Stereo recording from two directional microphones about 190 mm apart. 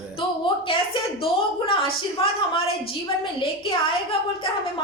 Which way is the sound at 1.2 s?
30° left (ahead or behind).